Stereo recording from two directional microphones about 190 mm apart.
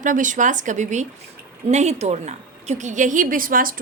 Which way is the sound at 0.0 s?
40° right (ahead or behind).